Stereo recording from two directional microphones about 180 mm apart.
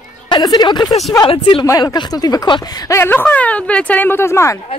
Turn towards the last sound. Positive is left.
turn(degrees=15)  # may be behind; listen again after turning